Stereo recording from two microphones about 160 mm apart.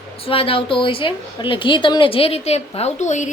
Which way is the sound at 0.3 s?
35° left (ahead or behind).